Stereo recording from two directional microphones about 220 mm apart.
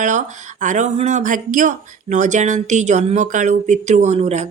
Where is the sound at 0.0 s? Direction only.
35° right (ahead or behind).